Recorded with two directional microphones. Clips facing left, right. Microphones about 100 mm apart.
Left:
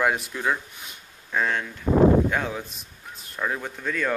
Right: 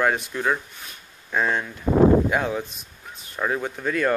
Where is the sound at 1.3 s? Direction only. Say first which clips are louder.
Right 2 dB; 10° right (ahead or behind).